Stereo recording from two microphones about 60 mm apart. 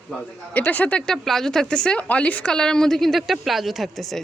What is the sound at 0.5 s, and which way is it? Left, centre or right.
Speech, left.